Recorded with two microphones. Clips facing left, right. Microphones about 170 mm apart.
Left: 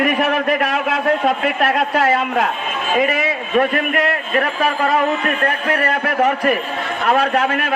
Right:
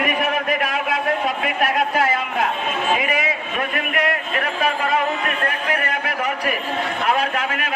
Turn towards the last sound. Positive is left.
turn(degrees=45)  # may be behind; listen again after turning